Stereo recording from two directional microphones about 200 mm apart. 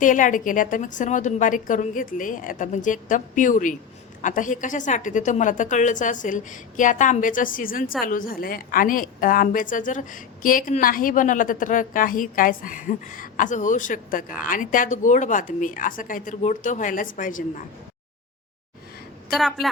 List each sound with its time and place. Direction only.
0.0 s a woman's voice: 40° left (ahead or behind)
19.3 s a woman's voice: centre (ahead or behind)